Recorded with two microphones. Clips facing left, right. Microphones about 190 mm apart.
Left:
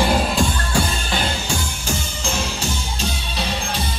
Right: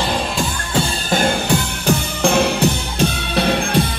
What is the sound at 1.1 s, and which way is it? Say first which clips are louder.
Music: right 7 dB; 50° right (ahead or behind).